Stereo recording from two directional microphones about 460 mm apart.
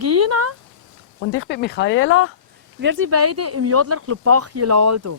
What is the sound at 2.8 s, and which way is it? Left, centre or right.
Speech, right.